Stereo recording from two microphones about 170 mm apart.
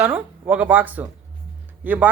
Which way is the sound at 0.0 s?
10° right (ahead or behind).